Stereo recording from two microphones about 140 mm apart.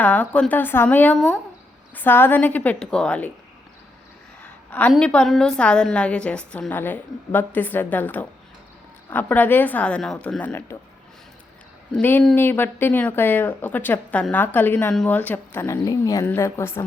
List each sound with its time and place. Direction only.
0.0 s a woman's voice: 10° left (ahead or behind)
2.0 s a woman's voice: 15° left (ahead or behind)
4.4 s a woman's voice: 10° left (ahead or behind)
11.9 s a woman's voice: 10° left (ahead or behind)